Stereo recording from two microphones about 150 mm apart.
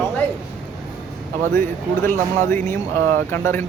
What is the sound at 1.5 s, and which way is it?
Speech, 15° left (ahead or behind).